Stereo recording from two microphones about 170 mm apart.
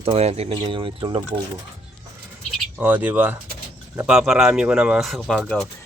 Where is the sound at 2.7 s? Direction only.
10° right (ahead or behind).